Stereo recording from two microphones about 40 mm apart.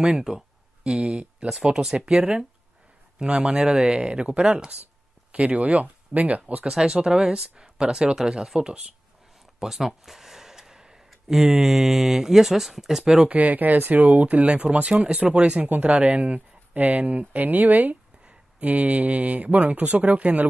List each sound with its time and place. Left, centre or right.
0.0 s speech: centre
5.3 s speech: right
6.7 s speech: centre
9.6 s a sound: centre
11.1 s speech: centre
13.3 s speech: right
14.9 s speech: right
15.7 s speech: right